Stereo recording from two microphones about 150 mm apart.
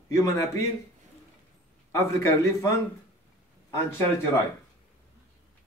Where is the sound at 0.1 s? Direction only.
20° left (ahead or behind).